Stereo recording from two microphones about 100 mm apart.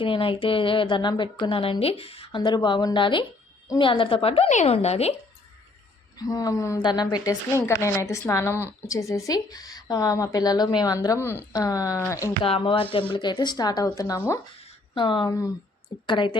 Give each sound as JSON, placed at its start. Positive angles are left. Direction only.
{"t": 0.0, "sound": "a woman's voice", "side_deg": 60}
{"t": 1.5, "sound": "a woman's voice", "side_deg": 65}
{"t": 6.1, "sound": "a woman's voice", "side_deg": 35}
{"t": 6.7, "sound": "speech", "side_deg": 45}
{"t": 7.5, "sound": "a woman's voice", "side_deg": 25}
{"t": 10.9, "sound": "a woman's voice", "side_deg": 35}
{"t": 12.4, "sound": "speech", "side_deg": 65}
{"t": 14.6, "sound": "a sound", "side_deg": 55}
{"t": 15.3, "sound": "a woman's voice", "side_deg": 35}
{"t": 16.0, "sound": "speech", "side_deg": 55}